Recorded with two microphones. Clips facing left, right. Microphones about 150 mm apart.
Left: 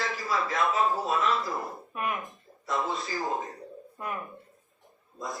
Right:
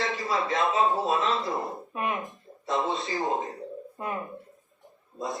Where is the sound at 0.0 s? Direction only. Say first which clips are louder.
Right 2 dB; 20° right (ahead or behind).